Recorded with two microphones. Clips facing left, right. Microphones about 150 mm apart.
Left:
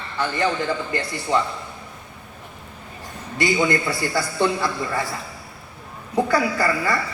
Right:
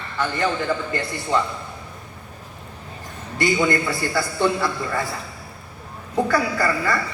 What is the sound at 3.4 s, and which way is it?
A woman's voice, 20° left (ahead or behind).